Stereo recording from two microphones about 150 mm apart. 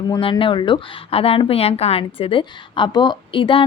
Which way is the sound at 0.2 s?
35° left (ahead or behind).